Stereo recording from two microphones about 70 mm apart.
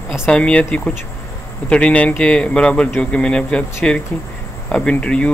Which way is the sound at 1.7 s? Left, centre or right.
Centre.